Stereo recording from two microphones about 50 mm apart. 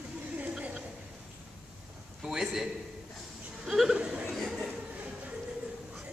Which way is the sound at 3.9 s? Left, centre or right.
Right.